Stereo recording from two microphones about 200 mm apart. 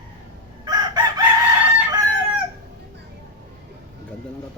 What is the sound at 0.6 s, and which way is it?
Chicken, 20° right (ahead or behind).